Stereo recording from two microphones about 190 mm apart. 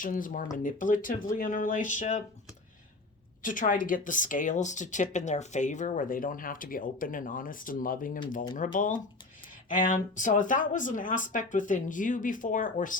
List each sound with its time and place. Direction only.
0.0 s speech: 45° left (ahead or behind)
3.4 s speech: 45° left (ahead or behind)